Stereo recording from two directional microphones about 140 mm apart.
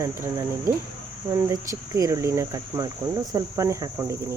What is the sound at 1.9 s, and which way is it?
Speech, 25° right (ahead or behind).